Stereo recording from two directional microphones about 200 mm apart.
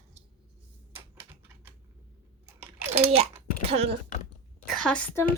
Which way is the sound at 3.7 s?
30° right (ahead or behind).